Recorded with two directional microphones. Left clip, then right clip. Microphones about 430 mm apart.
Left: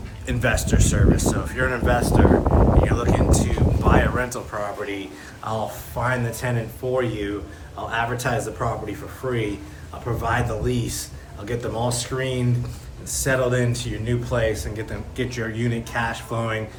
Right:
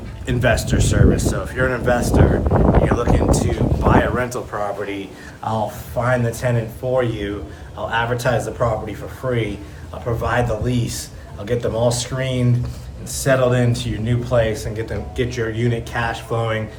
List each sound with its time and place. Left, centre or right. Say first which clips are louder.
0.3 s speech: right 4 dB; centre